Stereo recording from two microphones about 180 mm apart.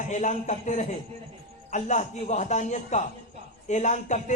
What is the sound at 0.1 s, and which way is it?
A man's voice, 40° left (ahead or behind).